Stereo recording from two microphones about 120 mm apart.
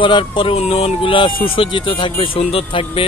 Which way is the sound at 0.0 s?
45° left (ahead or behind).